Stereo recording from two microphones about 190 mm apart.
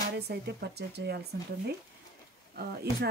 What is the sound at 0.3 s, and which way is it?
Speech, 60° right (ahead or behind).